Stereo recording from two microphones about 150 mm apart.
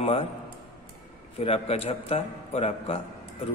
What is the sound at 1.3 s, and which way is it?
A man's voice, 40° left (ahead or behind).